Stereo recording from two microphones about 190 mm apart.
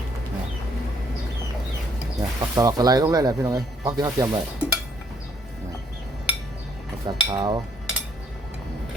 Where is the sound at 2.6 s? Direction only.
20° right (ahead or behind).